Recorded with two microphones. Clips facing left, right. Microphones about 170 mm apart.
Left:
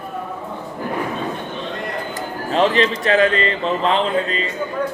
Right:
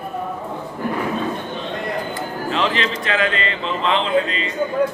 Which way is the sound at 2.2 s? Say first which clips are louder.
Left 7 dB; 40° left (ahead or behind).